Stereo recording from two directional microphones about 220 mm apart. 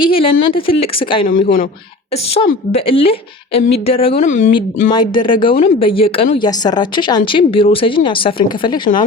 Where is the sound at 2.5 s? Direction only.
25° left (ahead or behind).